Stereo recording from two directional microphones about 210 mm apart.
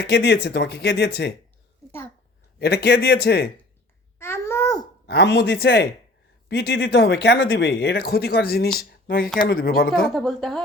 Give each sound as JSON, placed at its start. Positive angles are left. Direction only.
{"t": 0.0, "sound": "speech", "side_deg": 55}
{"t": 2.6, "sound": "speech", "side_deg": 50}
{"t": 4.2, "sound": "babbling", "side_deg": 10}
{"t": 5.0, "sound": "speech", "side_deg": 50}
{"t": 10.2, "sound": "a woman's voice", "side_deg": 0}